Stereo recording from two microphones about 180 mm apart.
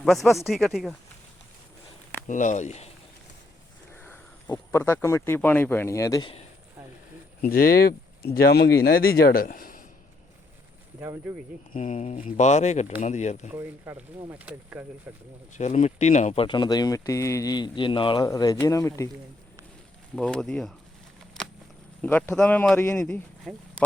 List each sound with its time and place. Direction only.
0.0 s speech: centre (ahead or behind)
2.2 s speech: 45° left (ahead or behind)
3.9 s speech: 10° left (ahead or behind)
7.4 s speech: 55° left (ahead or behind)
11.0 s speech: 15° right (ahead or behind)
11.7 s speech: 45° left (ahead or behind)
13.5 s speech: 10° right (ahead or behind)
15.5 s speech: 40° left (ahead or behind); by 19.1 s 15° left (ahead or behind)
20.1 s speech: 5° left (ahead or behind)
22.0 s a man's voice: 10° left (ahead or behind)